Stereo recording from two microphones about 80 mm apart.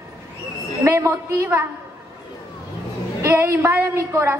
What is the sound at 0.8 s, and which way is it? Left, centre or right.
Speech, right.